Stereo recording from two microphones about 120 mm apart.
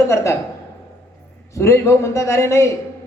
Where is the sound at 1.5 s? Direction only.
25° left (ahead or behind).